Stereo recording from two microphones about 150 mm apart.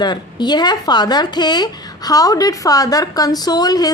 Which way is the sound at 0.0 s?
30° left (ahead or behind).